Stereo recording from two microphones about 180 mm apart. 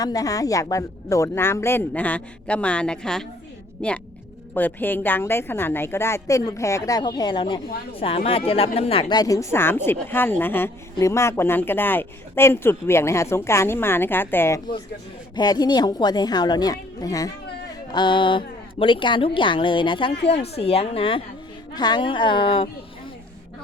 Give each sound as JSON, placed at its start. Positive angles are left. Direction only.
{"t": 0.0, "sound": "a woman's voice", "side_deg": 20}